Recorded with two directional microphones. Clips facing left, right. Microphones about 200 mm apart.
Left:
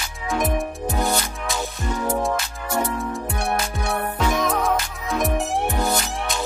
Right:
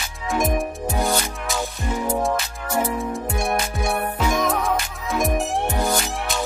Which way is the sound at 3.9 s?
10° right (ahead or behind).